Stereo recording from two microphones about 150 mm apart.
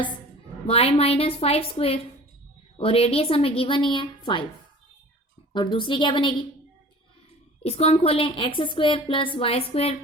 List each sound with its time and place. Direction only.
0.7 s a woman's voice: 40° left (ahead or behind)
5.7 s a woman's voice: 35° left (ahead or behind)
7.6 s a woman's voice: 45° left (ahead or behind)